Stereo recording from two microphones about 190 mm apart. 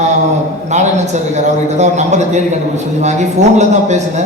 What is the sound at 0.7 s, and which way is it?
A man's voice, 35° right (ahead or behind).